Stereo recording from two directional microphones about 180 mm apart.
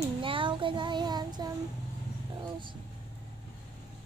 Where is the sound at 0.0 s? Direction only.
30° right (ahead or behind).